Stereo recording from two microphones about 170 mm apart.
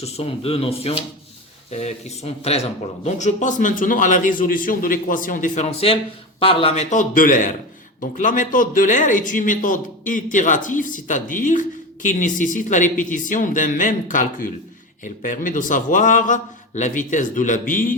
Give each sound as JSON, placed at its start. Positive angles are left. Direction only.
{"t": 0.0, "sound": "a man's voice", "side_deg": 35}